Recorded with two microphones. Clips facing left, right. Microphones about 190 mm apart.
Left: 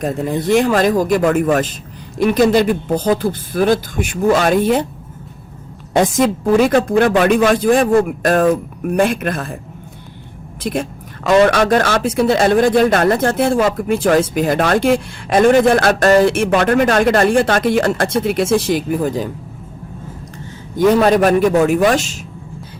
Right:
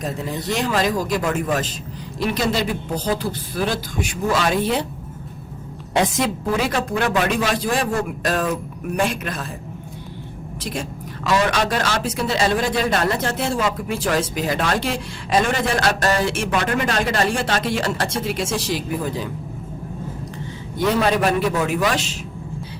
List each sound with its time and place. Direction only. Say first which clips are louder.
0.0 s speech: left 8 dB; 55° left (ahead or behind)
5.9 s speech: left 6 dB; 45° left (ahead or behind)
10.6 s speech: left 8 dB; 55° left (ahead or behind)
20.7 s speech: left 7 dB; 45° left (ahead or behind)